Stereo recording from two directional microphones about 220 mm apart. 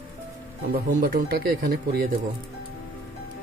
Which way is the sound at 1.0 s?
40° right (ahead or behind).